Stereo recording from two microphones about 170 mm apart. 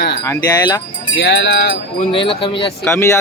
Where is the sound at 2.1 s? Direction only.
30° left (ahead or behind).